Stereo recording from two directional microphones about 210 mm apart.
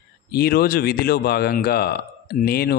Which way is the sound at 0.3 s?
50° left (ahead or behind).